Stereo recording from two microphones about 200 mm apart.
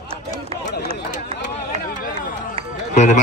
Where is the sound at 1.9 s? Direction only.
40° left (ahead or behind).